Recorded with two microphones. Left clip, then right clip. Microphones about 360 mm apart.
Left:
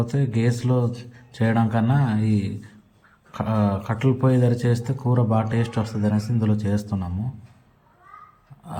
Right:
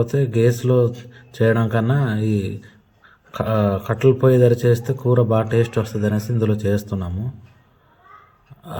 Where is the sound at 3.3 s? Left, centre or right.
Right.